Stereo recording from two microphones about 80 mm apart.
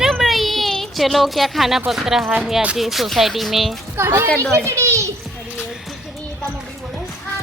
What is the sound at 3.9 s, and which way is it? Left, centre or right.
Speech, right.